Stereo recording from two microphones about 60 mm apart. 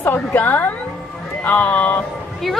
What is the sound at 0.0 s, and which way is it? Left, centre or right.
A woman's voice, left.